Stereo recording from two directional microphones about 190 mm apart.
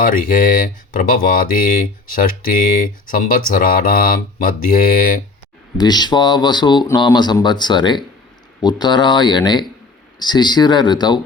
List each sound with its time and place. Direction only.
0.0 s speech: 45° left (ahead or behind)
5.7 s speech: 20° left (ahead or behind)